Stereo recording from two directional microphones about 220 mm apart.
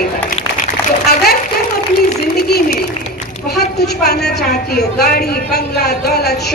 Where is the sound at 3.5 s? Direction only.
45° left (ahead or behind).